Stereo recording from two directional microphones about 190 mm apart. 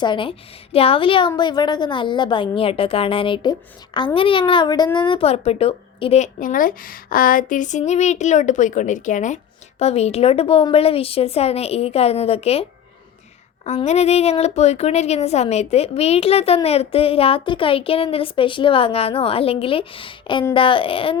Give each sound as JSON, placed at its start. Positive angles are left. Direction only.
{"t": 0.0, "sound": "a woman's voice", "side_deg": 25}
{"t": 13.7, "sound": "a woman's voice", "side_deg": 35}